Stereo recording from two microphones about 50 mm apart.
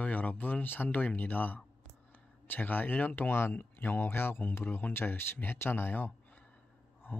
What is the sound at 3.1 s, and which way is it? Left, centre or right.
Speech, left.